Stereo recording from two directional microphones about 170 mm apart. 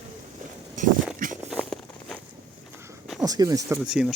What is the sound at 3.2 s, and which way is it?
Speech, 20° right (ahead or behind).